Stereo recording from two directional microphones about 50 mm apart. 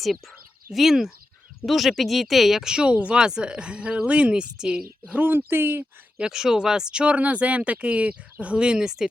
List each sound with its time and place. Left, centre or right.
0.7 s speech: centre
2.7 s speech: right
5.5 s speech: right
6.1 s speech: centre